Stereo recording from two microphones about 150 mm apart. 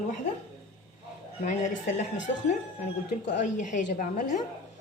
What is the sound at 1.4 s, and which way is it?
Speech, 55° left (ahead or behind).